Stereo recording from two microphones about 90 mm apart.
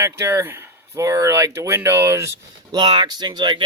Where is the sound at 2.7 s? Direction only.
55° right (ahead or behind).